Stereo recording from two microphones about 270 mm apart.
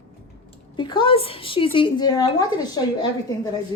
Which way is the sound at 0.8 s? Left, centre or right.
Centre.